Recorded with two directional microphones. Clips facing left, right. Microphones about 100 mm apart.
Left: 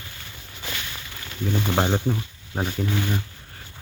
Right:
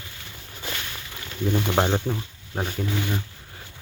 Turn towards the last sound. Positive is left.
turn(degrees=0)  # may be behind; listen again after turning